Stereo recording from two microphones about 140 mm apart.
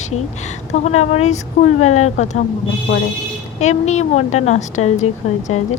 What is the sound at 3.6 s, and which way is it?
Speech, 55° left (ahead or behind).